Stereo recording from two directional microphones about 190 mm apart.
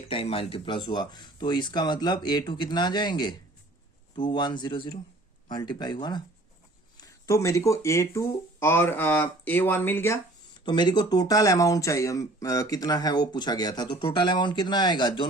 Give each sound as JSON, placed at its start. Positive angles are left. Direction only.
{"t": 0.1, "sound": "speech", "side_deg": 30}
{"t": 10.7, "sound": "speech", "side_deg": 25}